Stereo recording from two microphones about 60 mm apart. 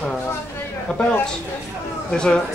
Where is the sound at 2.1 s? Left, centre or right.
Centre.